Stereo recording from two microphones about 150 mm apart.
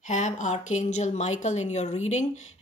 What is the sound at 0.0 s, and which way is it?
A woman's voice, 55° left (ahead or behind).